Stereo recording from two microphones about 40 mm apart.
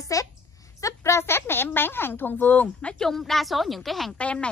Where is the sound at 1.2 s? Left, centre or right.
Left.